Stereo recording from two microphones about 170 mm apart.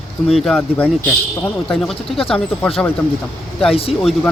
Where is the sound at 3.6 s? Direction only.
35° left (ahead or behind).